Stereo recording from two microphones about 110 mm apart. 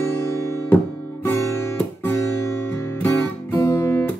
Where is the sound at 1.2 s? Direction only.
25° left (ahead or behind).